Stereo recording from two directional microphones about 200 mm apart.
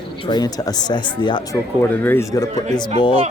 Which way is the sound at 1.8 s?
10° left (ahead or behind).